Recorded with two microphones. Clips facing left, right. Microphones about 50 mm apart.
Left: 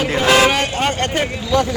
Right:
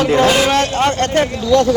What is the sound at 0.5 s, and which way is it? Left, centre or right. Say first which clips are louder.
Speech: right 4 dB; centre.